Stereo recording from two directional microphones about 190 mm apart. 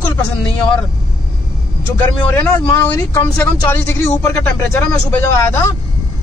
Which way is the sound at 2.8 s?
10° left (ahead or behind).